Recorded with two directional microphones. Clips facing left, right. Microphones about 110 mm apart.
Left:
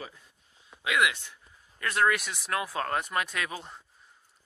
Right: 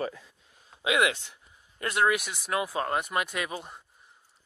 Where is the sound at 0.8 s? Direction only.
25° right (ahead or behind).